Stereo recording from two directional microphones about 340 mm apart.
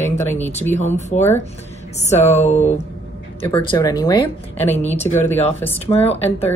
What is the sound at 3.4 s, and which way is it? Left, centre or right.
Speech, centre.